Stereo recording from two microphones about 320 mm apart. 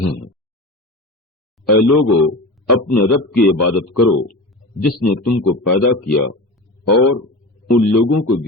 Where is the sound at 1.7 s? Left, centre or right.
Left.